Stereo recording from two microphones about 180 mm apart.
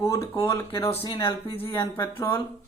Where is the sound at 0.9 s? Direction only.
30° left (ahead or behind).